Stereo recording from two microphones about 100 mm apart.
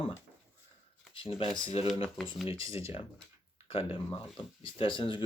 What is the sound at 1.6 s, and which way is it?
Speech, 80° left.